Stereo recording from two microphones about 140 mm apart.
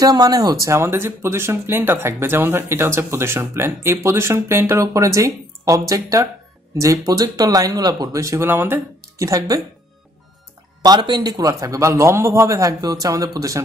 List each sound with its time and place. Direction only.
0.0 s speech: 25° right (ahead or behind)
10.8 s speech: 30° right (ahead or behind)